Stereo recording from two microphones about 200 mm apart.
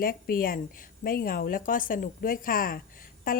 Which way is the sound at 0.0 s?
45° left (ahead or behind).